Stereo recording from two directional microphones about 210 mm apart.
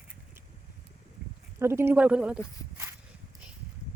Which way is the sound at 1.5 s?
10° right (ahead or behind).